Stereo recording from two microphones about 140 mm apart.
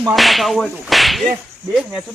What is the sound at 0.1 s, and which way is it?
Whip, centre (ahead or behind).